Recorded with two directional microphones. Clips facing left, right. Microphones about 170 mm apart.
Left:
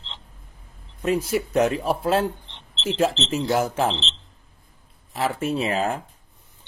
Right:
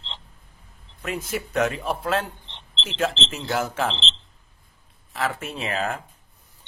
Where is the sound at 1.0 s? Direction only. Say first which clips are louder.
Left 7 dB; 35° left (ahead or behind).